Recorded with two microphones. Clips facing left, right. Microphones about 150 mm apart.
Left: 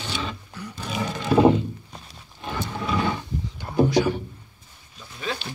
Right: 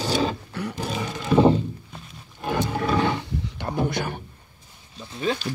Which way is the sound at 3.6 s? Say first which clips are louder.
Left 6 dB; 60° right (ahead or behind).